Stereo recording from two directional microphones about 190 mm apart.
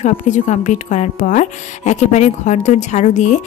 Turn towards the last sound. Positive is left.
turn(degrees=40)  # may be behind; listen again after turning